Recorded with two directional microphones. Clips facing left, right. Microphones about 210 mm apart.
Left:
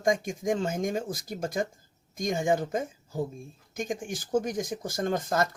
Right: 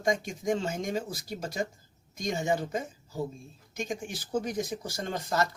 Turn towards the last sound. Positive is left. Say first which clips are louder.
# left 4 dB
turn(degrees=50)  # may be behind; listen again after turning